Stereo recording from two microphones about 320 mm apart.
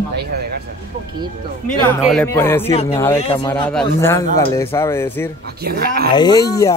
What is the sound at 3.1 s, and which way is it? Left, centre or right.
Speech, centre.